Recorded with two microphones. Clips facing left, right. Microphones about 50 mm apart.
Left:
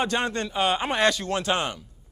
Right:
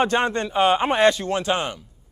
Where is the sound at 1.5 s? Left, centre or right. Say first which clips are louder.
Right 2 dB; centre.